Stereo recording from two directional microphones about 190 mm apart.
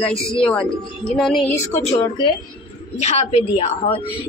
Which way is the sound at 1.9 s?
25° left (ahead or behind).